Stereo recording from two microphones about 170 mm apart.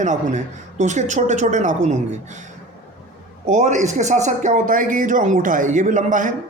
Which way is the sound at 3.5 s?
45° right (ahead or behind).